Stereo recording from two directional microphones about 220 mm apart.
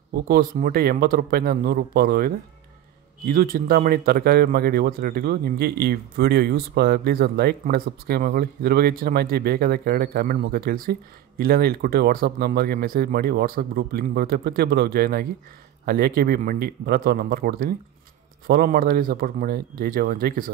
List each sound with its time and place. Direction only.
0.1 s speech: 40° right (ahead or behind)